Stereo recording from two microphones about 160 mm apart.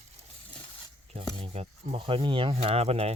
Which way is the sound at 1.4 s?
40° right (ahead or behind).